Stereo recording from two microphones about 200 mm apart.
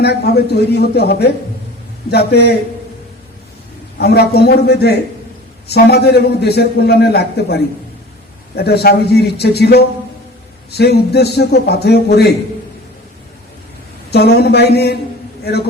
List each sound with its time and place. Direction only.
0.0 s a man's voice: 55° left (ahead or behind)
3.9 s a man's voice: 55° left (ahead or behind)
14.1 s a man's voice: 55° left (ahead or behind)